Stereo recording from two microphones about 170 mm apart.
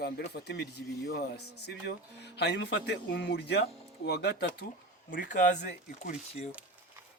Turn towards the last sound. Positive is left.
turn(degrees=50)  # may be behind; listen again after turning